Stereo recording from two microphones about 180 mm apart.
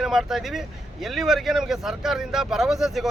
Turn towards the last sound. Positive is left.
turn(degrees=0)  # may be behind; listen again after turning